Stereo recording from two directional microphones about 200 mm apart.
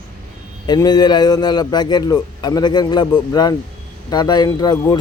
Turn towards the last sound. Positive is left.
turn(degrees=20)  # may be behind; listen again after turning